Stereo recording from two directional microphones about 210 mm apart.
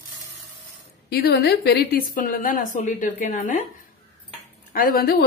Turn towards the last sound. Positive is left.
turn(degrees=45)  # may be behind; listen again after turning